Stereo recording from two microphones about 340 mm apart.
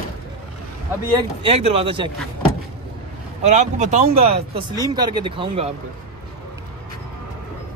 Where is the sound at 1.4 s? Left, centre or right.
Centre.